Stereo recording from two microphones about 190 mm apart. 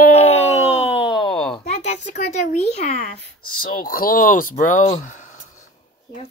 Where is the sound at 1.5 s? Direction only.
35° left (ahead or behind).